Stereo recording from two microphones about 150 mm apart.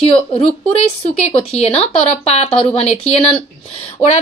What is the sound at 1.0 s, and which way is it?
A woman's voice, 45° left (ahead or behind).